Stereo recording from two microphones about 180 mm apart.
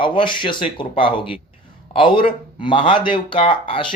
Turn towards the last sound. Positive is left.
turn(degrees=30)  # may be behind; listen again after turning